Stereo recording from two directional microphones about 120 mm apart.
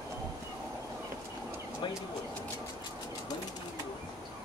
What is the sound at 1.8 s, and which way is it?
Speech, 40° left (ahead or behind).